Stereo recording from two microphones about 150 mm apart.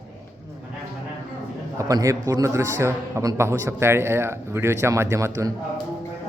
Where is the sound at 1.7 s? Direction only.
20° right (ahead or behind).